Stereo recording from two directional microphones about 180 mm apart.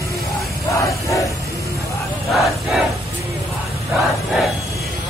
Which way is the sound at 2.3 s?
Centre (ahead or behind).